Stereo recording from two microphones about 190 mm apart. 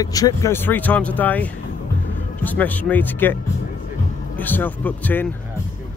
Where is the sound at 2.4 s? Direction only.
10° left (ahead or behind).